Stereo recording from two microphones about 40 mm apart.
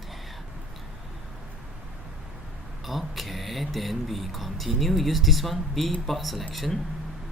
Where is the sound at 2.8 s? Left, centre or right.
Centre.